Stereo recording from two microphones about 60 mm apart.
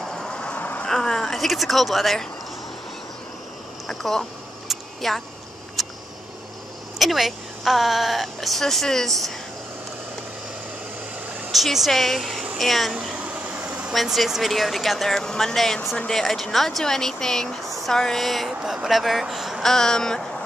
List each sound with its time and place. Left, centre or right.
0.0 s vehicle: centre
0.6 s vehicle: left
0.8 s a sound: centre
3.8 s a sound: centre
7.0 s speech: centre
11.5 s speech: centre
13.2 s vehicle: right
13.9 s speech: centre
18.5 s speech: centre
19.6 s a sound: centre